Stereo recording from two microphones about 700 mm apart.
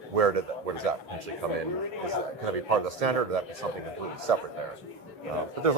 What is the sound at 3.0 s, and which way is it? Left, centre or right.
A man's voice, right.